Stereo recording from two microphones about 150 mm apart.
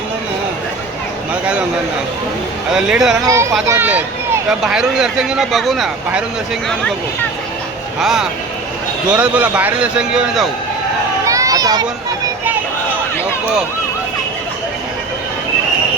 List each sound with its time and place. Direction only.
2.6 s speech: 5° right (ahead or behind)
3.2 s speech: 20° right (ahead or behind); by 6.2 s 5° right (ahead or behind)
7.9 s a man's voice: 5° right (ahead or behind)
11.3 s a sound: 20° right (ahead or behind)